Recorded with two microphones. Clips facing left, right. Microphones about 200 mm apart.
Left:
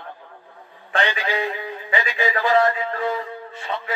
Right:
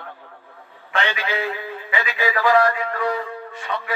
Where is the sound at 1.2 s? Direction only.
15° left (ahead or behind).